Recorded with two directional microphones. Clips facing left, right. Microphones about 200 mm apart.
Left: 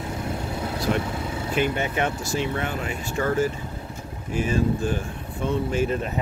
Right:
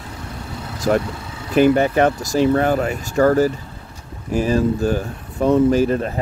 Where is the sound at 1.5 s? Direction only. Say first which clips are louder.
Right 11 dB; 40° right (ahead or behind).